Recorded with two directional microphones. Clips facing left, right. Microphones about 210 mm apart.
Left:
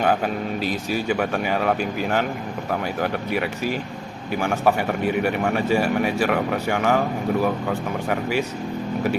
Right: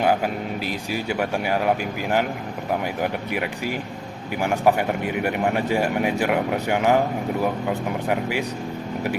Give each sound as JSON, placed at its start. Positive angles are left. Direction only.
{"t": 0.6, "sound": "speech", "side_deg": -15}